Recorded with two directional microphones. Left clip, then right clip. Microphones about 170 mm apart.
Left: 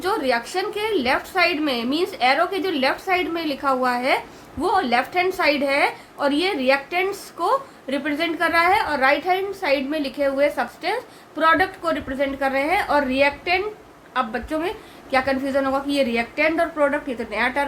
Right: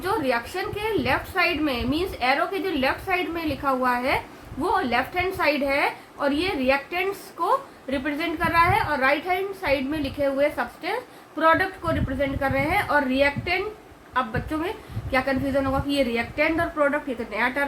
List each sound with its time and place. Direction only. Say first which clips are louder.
0.0 s a woman's voice: left 3 dB; 45° left (ahead or behind)